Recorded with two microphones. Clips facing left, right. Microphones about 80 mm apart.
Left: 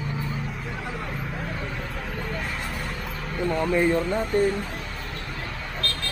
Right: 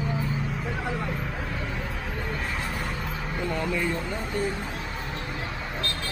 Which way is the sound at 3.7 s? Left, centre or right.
Left.